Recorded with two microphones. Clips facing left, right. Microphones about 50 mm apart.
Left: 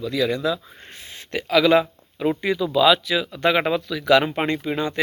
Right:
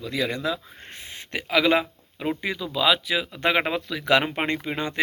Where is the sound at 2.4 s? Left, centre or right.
Centre.